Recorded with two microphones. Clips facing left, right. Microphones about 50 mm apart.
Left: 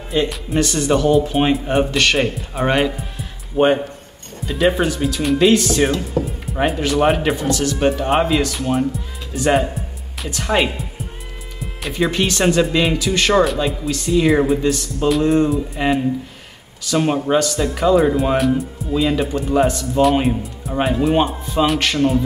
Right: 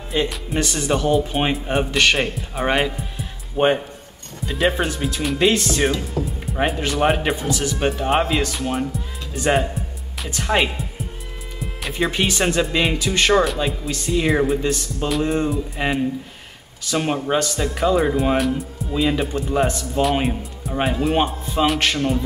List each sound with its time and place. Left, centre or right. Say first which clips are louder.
0.1 s speech: left 3 dB; centre
1.9 s speech: even; centre
2.1 s speech: left 3 dB; centre
11.6 s music: left 3 dB; centre
12.1 s speech: left 4 dB; centre
13.3 s speech: left 3 dB; centre